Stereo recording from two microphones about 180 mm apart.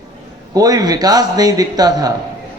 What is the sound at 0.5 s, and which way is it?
A man's voice, 20° right (ahead or behind).